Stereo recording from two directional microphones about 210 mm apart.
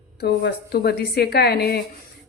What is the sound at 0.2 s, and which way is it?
A woman's voice, 50° left (ahead or behind).